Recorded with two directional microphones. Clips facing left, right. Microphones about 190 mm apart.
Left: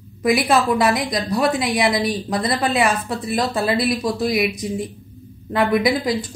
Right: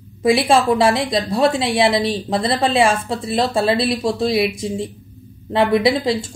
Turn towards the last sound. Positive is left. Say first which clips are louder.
# right 2 dB
turn(degrees=-25)  # may be behind; listen again after turning